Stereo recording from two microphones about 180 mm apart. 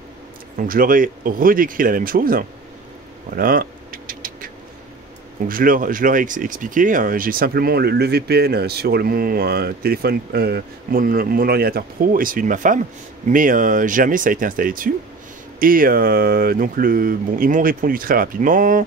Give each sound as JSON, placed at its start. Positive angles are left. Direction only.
{"t": 0.6, "sound": "speech", "side_deg": -50}
{"t": 3.3, "sound": "rodents", "side_deg": -50}
{"t": 5.5, "sound": "speech", "side_deg": -50}